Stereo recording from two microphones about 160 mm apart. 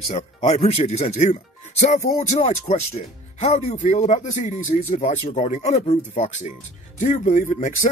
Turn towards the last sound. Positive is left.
turn(degrees=50)  # may be behind; listen again after turning